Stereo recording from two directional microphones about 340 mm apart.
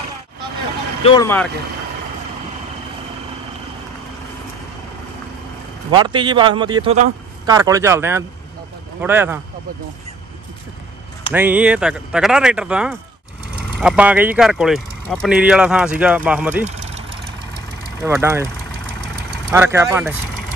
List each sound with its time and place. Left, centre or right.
1.0 s speech: centre
5.9 s a man's voice: centre
11.3 s speech: centre
16.6 s engine: centre
18.0 s a man's voice: centre
19.5 s a man's voice: centre